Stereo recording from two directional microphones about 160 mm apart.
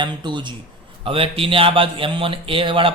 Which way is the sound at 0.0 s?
30° right (ahead or behind).